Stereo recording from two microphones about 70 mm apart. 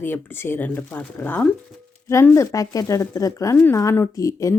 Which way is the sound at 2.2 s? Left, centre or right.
Left.